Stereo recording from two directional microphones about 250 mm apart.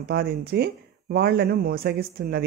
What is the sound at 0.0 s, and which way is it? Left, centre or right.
Speech, right.